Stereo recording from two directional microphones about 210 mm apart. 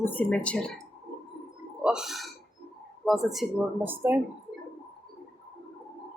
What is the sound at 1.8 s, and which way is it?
Speech, centre (ahead or behind).